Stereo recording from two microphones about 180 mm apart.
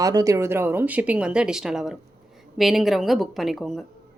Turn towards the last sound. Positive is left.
turn(degrees=0)  # may be behind; listen again after turning